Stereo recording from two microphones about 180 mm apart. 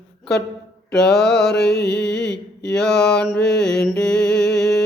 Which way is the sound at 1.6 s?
65° left (ahead or behind).